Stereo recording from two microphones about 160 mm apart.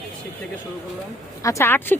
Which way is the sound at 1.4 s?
15° left (ahead or behind).